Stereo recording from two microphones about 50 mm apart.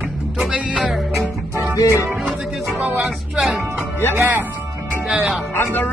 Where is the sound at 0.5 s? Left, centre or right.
Right.